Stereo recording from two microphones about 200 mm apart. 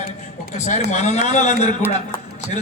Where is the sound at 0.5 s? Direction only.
35° left (ahead or behind).